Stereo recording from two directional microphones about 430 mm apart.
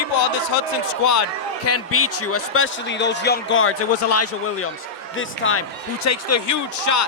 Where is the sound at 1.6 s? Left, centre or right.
Left.